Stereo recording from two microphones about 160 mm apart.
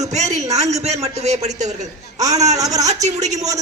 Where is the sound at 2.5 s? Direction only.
20° right (ahead or behind).